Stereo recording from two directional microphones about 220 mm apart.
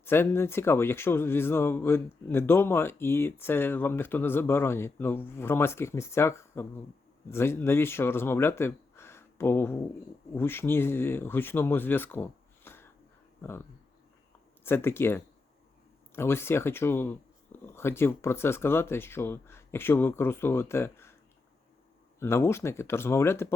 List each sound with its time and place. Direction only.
0.0 s a man's voice: 10° left (ahead or behind)
22.2 s a man's voice: 10° left (ahead or behind)